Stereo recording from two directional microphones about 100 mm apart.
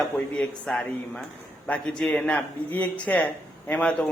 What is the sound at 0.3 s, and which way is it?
Speech, 10° left (ahead or behind).